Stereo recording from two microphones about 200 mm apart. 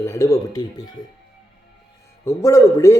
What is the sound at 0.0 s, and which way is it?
Speech, 15° left (ahead or behind).